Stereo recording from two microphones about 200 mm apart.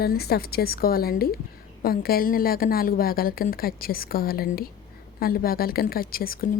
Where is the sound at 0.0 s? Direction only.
50° left (ahead or behind).